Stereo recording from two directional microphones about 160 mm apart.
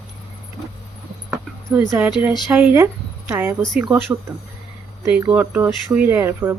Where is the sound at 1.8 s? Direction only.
20° right (ahead or behind).